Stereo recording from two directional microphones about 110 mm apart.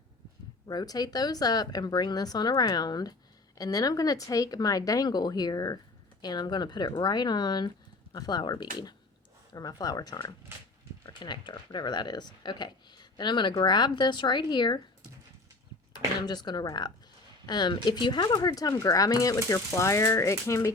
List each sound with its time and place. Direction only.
0.7 s speech: 35° left (ahead or behind)
16.2 s speech: 40° left (ahead or behind)